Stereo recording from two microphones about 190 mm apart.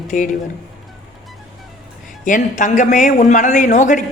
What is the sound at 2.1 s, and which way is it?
Speech, 45° left (ahead or behind).